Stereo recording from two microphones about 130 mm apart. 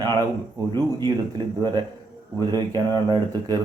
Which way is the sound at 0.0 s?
30° right (ahead or behind).